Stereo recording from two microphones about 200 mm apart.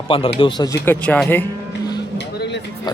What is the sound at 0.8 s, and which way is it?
Speech, 10° left (ahead or behind).